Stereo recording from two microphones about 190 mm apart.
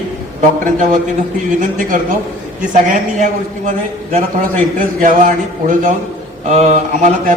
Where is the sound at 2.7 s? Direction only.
40° right (ahead or behind).